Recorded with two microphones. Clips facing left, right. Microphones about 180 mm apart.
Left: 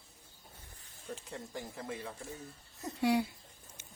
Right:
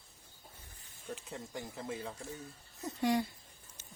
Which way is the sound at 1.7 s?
25° right (ahead or behind).